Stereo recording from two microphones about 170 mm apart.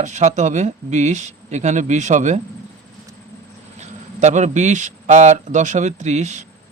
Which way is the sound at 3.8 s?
40° right (ahead or behind).